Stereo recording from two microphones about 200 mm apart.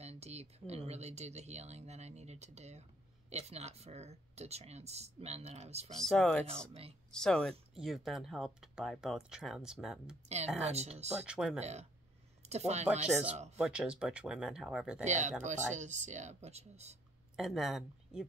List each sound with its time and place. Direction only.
0.0 s speech: 30° right (ahead or behind)
5.9 s speech: 5° left (ahead or behind)
6.7 s speech: 30° right (ahead or behind)
7.1 s speech: 5° left (ahead or behind)
10.2 s speech: 35° right (ahead or behind)
11.2 s speech: 5° right (ahead or behind)
12.4 s speech: 35° right (ahead or behind)
13.0 s speech: 5° right (ahead or behind)
15.0 s speech: 35° right (ahead or behind)
17.4 s speech: centre (ahead or behind)